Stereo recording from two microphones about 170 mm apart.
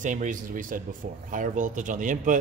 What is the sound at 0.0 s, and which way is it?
A man's voice, 50° right (ahead or behind).